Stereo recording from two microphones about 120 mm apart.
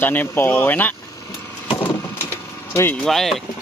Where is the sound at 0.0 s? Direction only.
15° left (ahead or behind).